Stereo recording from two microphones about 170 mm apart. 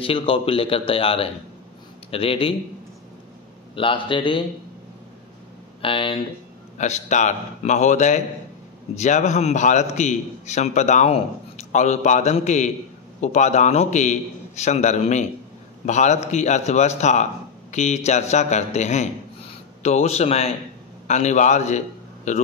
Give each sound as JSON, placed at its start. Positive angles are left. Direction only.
{"t": 0.0, "sound": "a man's voice", "side_deg": 30}
{"t": 3.7, "sound": "a man's voice", "side_deg": 30}
{"t": 5.8, "sound": "speech", "side_deg": 30}
{"t": 6.8, "sound": "a man's voice", "side_deg": 45}